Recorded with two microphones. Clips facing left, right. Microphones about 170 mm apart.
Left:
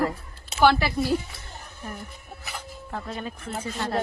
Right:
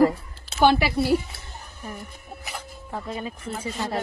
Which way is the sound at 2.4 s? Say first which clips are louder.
Even; 10° right (ahead or behind).